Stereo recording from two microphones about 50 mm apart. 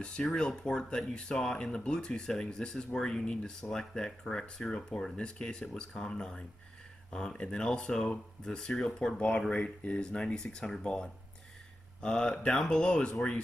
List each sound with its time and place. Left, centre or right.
0.0 s speech: centre
9.5 s speech: left